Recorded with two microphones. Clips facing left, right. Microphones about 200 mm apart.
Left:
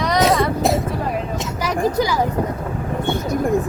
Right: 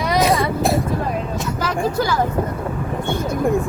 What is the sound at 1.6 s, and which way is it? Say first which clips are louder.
Speech: left 2 dB; 15° left (ahead or behind).